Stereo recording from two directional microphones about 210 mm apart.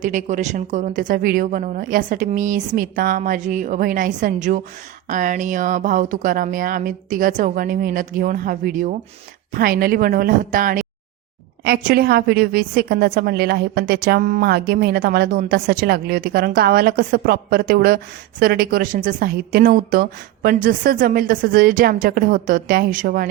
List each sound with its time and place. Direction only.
0.0 s a woman's voice: 35° right (ahead or behind)